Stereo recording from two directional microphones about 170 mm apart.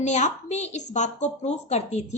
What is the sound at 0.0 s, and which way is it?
A woman's voice, 45° left (ahead or behind).